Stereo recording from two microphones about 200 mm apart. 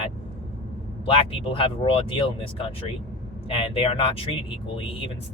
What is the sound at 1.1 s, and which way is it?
Speech, 25° left (ahead or behind).